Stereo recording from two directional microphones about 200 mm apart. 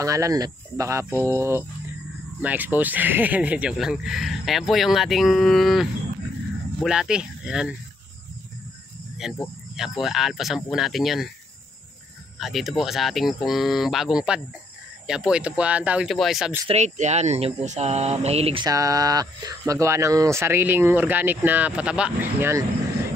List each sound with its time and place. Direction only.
0.0 s speech: 15° right (ahead or behind)
9.2 s speech: centre (ahead or behind)
12.4 s speech: centre (ahead or behind)
16.6 s speech: 35° right (ahead or behind); by 22.7 s 15° right (ahead or behind)